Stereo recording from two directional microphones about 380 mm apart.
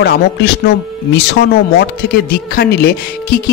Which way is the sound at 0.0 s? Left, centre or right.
Left.